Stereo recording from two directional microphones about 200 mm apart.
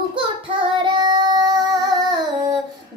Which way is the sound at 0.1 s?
25° right (ahead or behind).